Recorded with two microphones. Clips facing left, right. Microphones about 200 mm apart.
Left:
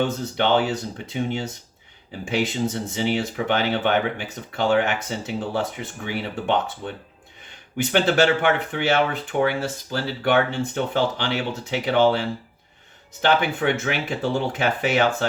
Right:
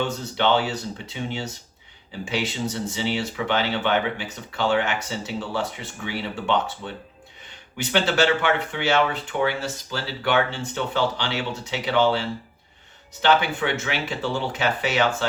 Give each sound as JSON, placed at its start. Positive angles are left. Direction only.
{"t": 0.0, "sound": "speech", "side_deg": 50}